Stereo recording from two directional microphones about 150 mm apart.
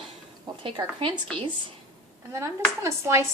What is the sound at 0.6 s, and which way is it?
Speech, 35° right (ahead or behind).